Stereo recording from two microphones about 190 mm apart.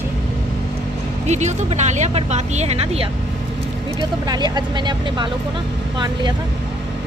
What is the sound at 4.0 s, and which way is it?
Speech, 20° right (ahead or behind).